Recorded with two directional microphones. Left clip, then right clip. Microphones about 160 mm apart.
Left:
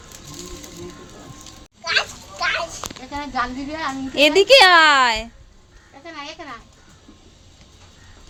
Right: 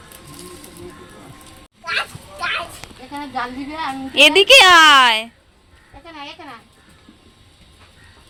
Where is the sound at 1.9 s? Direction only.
20° right (ahead or behind).